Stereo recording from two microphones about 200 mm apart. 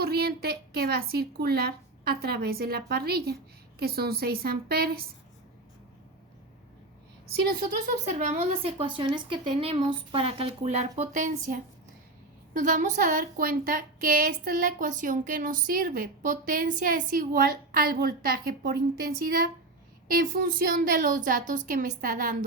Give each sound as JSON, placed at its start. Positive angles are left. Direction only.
{"t": 0.0, "sound": "a woman's voice", "side_deg": -50}
{"t": 8.2, "sound": "a woman's voice", "side_deg": -35}